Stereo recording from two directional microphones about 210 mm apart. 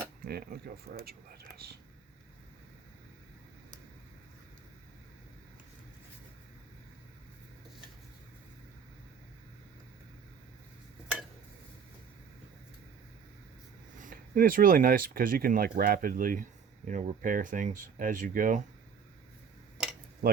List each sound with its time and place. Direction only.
0.3 s speech: 45° right (ahead or behind)
14.0 s speech: 40° right (ahead or behind)
20.2 s speech: 45° right (ahead or behind)